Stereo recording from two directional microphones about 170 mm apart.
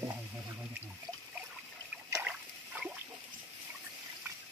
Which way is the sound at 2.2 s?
5° right (ahead or behind).